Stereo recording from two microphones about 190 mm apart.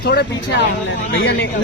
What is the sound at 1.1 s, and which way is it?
Speech, 85° left.